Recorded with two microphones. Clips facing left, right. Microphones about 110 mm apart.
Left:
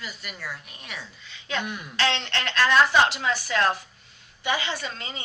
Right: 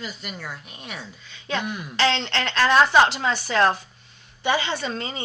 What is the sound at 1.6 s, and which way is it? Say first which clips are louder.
Speech: right 3 dB; 5° right (ahead or behind).